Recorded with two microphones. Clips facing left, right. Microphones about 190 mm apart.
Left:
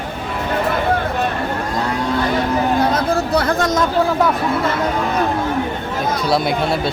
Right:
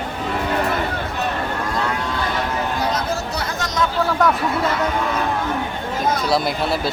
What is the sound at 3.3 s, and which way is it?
Chatter, 55° left (ahead or behind).